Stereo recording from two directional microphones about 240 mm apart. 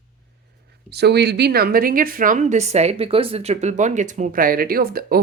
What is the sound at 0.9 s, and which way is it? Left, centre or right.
Speech, right.